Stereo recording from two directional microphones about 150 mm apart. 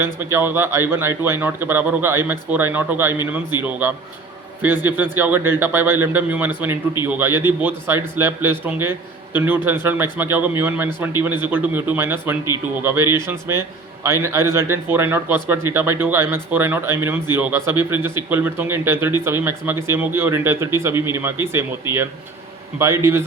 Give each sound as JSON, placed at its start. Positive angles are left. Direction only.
{"t": 0.0, "sound": "speech", "side_deg": -15}
{"t": 5.1, "sound": "speech", "side_deg": -15}